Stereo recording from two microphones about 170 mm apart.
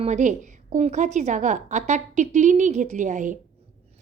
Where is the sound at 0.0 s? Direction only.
45° right (ahead or behind).